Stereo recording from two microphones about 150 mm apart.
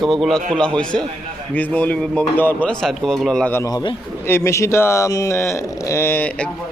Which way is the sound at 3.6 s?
30° left (ahead or behind).